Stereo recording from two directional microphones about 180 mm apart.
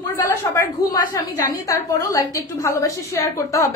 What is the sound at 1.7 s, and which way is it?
A woman's voice, 15° left (ahead or behind).